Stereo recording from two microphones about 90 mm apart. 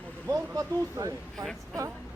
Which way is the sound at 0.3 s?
40° right (ahead or behind).